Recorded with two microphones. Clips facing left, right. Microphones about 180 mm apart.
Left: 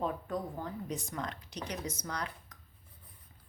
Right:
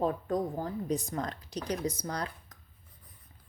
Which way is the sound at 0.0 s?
40° right (ahead or behind).